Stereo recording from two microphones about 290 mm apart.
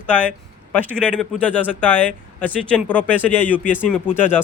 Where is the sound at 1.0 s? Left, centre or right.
Centre.